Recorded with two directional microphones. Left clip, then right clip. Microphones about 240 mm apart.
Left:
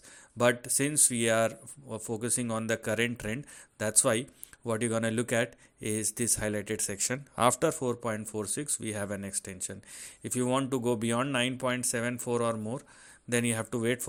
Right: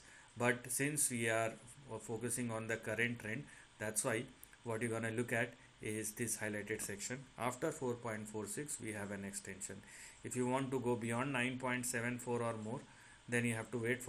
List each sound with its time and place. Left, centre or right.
0.3 s speech: left
7.6 s speech: left
7.9 s speech: left
8.3 s speech: left
10.3 s speech: left